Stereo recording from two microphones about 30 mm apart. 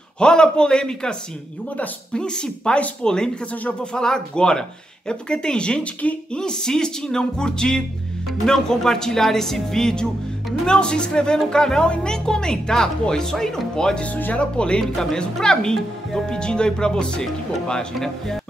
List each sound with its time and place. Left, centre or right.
0.2 s speech: left
2.1 s speech: left
8.6 s music: centre
10.7 s speech: left
14.4 s speech: left
14.8 s music: centre
15.4 s speech: left